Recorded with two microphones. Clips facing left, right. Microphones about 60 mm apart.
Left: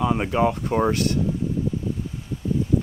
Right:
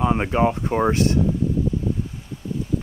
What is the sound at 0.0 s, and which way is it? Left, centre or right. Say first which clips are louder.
Speech: right 1 dB; right.